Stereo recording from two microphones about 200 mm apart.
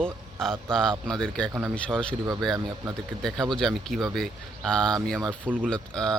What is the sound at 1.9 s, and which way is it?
Speech, 20° right (ahead or behind).